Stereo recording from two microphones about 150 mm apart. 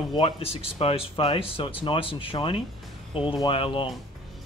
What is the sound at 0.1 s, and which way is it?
Speech, 40° left (ahead or behind).